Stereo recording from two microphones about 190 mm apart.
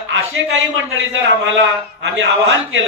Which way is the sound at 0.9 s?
80° right.